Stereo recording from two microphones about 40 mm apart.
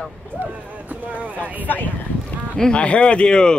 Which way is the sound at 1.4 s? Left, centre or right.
Left.